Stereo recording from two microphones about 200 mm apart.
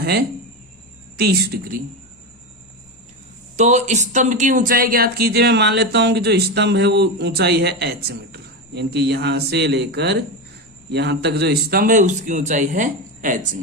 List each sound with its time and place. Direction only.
0.0 s a woman's voice: 50° right (ahead or behind)
3.6 s a man's voice: 35° right (ahead or behind)